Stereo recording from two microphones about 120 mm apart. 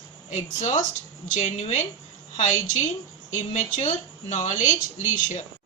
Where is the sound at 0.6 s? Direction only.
80° left.